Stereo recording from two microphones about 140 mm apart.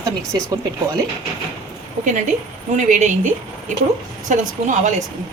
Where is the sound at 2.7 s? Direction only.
60° right (ahead or behind).